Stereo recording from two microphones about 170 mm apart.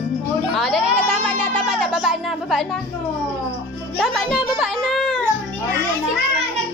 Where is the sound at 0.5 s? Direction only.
Centre (ahead or behind).